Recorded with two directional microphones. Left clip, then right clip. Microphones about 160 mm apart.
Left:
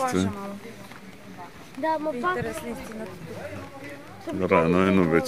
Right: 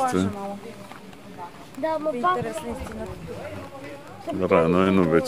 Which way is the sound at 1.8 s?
50° left (ahead or behind).